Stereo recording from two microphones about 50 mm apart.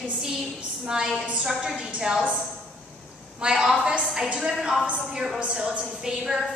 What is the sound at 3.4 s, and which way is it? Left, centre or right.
A woman's voice, centre.